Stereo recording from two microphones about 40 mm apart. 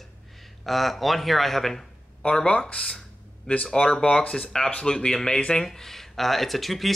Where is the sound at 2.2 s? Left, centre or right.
Left.